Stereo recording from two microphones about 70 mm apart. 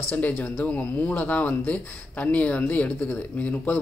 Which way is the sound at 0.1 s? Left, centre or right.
Left.